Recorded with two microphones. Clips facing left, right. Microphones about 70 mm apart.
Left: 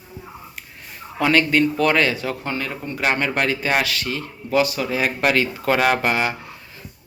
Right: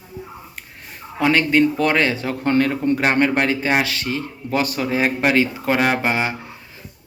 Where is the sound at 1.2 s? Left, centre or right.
Right.